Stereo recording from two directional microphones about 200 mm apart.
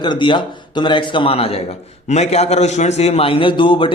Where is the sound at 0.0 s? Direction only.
25° left (ahead or behind).